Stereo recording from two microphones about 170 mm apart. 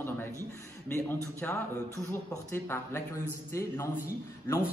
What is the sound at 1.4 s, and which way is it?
Speech, 10° left (ahead or behind).